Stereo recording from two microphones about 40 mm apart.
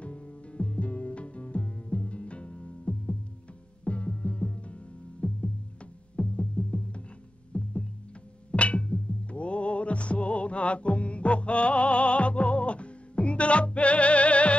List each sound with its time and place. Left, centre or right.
0.0 s music: left
7.5 s a sound: left
8.5 s music: left